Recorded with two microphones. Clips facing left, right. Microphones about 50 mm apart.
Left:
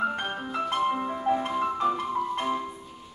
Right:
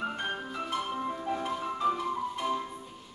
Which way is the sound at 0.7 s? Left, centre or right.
Left.